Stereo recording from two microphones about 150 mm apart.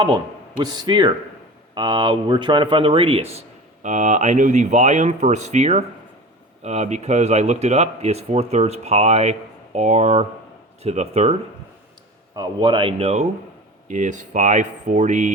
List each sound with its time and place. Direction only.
0.6 s a man's voice: 30° right (ahead or behind)
3.8 s speech: 55° right (ahead or behind)
12.3 s speech: 25° right (ahead or behind); by 13.2 s 45° right (ahead or behind)
13.8 s speech: 55° right (ahead or behind)